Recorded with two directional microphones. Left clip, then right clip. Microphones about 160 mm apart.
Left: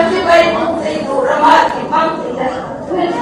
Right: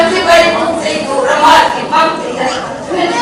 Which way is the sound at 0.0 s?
10° left (ahead or behind).